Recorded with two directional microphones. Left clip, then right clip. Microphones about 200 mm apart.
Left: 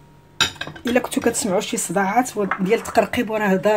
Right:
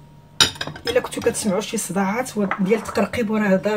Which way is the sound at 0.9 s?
45° left (ahead or behind).